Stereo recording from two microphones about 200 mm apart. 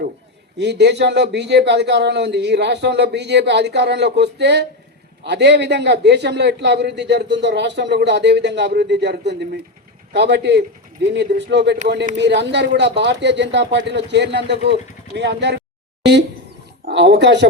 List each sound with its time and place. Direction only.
0.6 s a man's voice: 55° right (ahead or behind)
16.8 s a man's voice: 60° right (ahead or behind)